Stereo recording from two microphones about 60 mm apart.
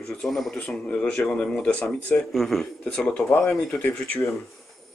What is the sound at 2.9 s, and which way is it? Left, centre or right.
Speech, centre.